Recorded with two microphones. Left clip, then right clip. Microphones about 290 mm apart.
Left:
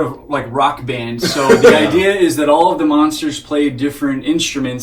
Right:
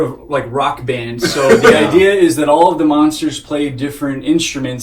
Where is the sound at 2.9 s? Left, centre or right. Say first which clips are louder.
Right 1 dB; left.